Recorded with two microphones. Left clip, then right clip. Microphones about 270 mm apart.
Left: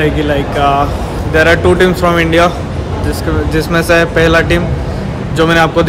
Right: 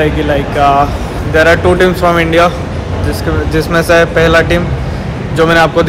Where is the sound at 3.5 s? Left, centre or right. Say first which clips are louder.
Right 2 dB; centre.